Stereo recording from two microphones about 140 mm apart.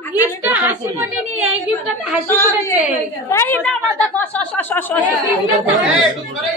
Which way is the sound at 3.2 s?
15° left (ahead or behind).